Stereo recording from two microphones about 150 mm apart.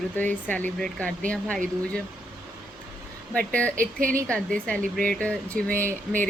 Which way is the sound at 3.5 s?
10° left (ahead or behind).